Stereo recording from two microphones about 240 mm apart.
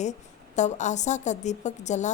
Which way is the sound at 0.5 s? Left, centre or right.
Left.